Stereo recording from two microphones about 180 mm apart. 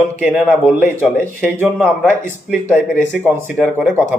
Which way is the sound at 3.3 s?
10° right (ahead or behind).